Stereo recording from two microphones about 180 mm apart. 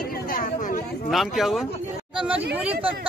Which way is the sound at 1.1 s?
Centre (ahead or behind).